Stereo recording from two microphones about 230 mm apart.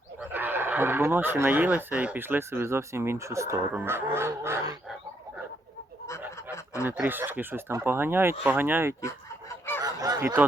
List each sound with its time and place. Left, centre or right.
0.2 s speech: centre
6.3 s a sound: centre
6.8 s speech: centre
9.8 s honk: centre